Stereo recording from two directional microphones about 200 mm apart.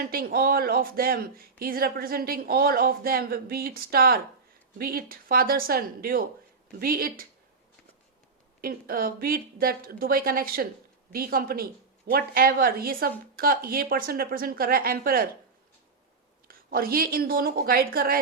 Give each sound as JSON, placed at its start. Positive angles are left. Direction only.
{"t": 0.0, "sound": "speech", "side_deg": -45}
{"t": 8.6, "sound": "speech", "side_deg": -45}
{"t": 16.5, "sound": "speech", "side_deg": -45}